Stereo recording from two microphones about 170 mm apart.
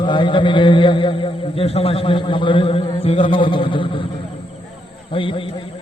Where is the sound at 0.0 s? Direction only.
25° left (ahead or behind).